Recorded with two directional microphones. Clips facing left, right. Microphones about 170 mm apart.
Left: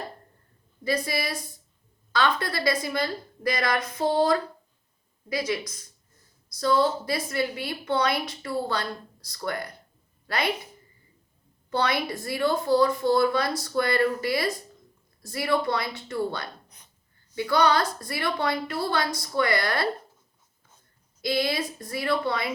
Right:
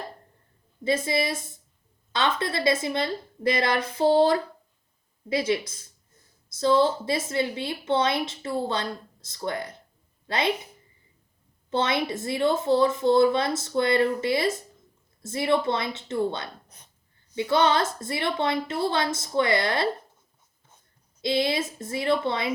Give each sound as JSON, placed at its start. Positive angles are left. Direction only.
{"t": 0.9, "sound": "a woman's voice", "side_deg": -25}
{"t": 11.7, "sound": "a woman's voice", "side_deg": -25}
{"t": 21.2, "sound": "a woman's voice", "side_deg": -25}